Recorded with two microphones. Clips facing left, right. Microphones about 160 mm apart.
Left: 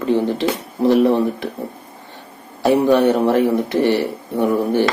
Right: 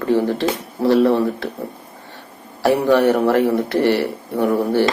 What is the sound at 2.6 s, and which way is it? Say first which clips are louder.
A man's voice: left 1 dB; 20° left (ahead or behind).